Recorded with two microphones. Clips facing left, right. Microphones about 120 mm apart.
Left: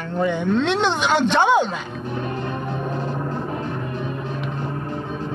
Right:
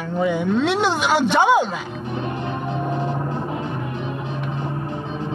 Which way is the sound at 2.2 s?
20° right (ahead or behind).